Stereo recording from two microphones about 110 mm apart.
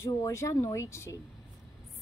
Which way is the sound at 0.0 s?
25° left (ahead or behind).